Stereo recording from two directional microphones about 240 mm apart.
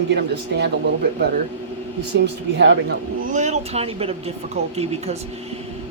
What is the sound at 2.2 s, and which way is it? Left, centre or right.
Speech, right.